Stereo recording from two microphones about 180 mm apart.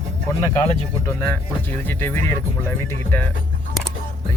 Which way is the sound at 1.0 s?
10° left (ahead or behind).